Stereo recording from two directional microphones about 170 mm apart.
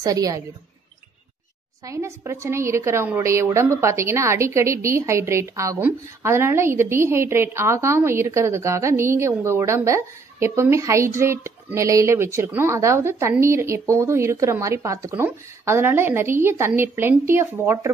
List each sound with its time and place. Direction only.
0.0 s a woman's voice: 20° right (ahead or behind)
1.9 s a woman's voice: 15° right (ahead or behind)